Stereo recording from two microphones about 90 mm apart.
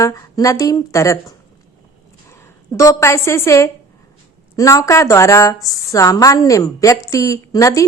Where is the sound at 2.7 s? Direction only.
35° left (ahead or behind).